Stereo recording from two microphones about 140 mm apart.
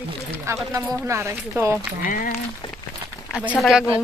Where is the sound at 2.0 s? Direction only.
80° left.